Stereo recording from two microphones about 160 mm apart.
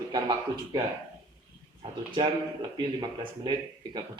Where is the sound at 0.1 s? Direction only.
25° right (ahead or behind).